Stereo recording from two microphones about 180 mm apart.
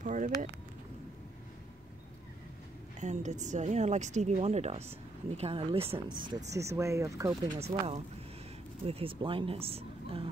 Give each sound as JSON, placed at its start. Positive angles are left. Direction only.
{"t": 0.0, "sound": "vehicle", "side_deg": -45}
{"t": 3.0, "sound": "a woman's voice", "side_deg": -40}
{"t": 8.8, "sound": "a woman's voice", "side_deg": -30}